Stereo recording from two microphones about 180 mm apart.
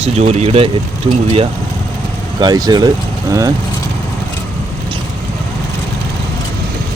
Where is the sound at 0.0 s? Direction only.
35° right (ahead or behind).